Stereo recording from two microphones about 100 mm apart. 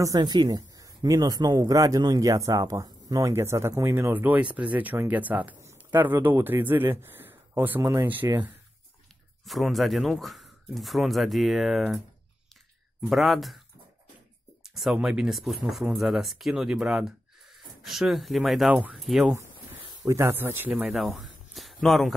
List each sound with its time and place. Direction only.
0.0 s a man's voice: 40° right (ahead or behind); by 8.3 s 20° right (ahead or behind)
9.4 s speech: centre (ahead or behind)
13.1 s speech: centre (ahead or behind)
14.6 s speech: 5° right (ahead or behind)
20.1 s speech: 25° right (ahead or behind)
20.8 s speech: centre (ahead or behind)